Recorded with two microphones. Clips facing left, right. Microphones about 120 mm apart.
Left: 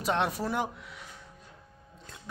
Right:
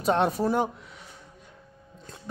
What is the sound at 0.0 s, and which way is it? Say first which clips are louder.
Speech: right 6 dB; 35° right (ahead or behind).